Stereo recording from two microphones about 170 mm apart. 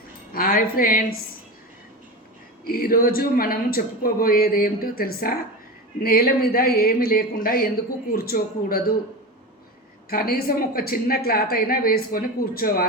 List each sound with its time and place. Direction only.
0.3 s a woman's voice: 60° left (ahead or behind)
2.6 s a woman's voice: 60° left (ahead or behind)
10.1 s a woman's voice: 60° left (ahead or behind)